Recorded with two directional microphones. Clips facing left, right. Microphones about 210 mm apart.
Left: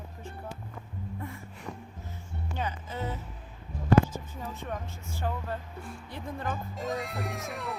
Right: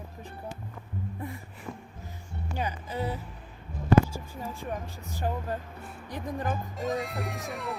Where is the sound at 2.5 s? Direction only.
10° right (ahead or behind).